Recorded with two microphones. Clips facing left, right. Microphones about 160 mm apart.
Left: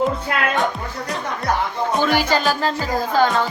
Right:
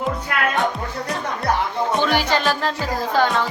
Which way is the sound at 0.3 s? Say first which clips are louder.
Left 1 dB; 25° left (ahead or behind).